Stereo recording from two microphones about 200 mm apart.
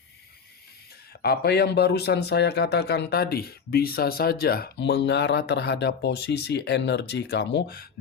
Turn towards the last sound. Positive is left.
turn(degrees=55)  # may be behind; listen again after turning